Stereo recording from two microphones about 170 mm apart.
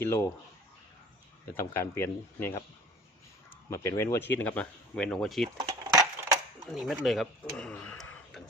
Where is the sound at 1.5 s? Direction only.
15° left (ahead or behind).